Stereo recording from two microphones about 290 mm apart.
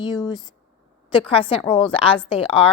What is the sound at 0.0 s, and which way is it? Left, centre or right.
A woman's voice, centre.